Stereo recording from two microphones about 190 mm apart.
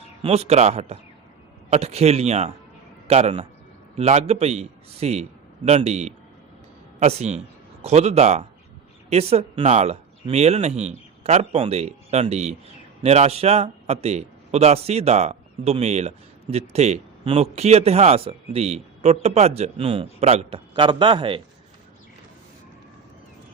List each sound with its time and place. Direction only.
0.2 s a man's voice: 35° right (ahead or behind)